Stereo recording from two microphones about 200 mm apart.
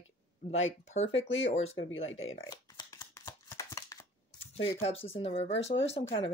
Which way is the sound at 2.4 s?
20° left (ahead or behind).